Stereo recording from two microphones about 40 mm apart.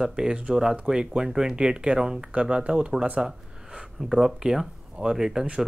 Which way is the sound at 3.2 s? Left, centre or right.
Right.